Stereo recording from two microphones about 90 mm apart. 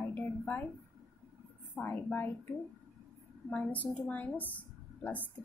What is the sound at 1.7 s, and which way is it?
Speech, 20° left (ahead or behind).